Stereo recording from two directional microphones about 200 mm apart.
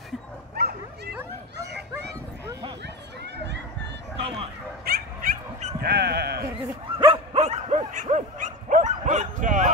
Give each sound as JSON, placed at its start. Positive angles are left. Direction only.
{"t": 0.6, "sound": "bow-wow", "side_deg": -55}
{"t": 1.6, "sound": "children playing", "side_deg": -55}
{"t": 4.2, "sound": "speech", "side_deg": -25}
{"t": 4.8, "sound": "dog", "side_deg": -45}
{"t": 5.8, "sound": "sheep", "side_deg": -50}
{"t": 7.0, "sound": "dog", "side_deg": -30}